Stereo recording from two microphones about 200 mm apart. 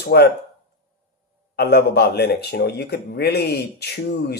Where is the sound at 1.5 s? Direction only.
55° left (ahead or behind).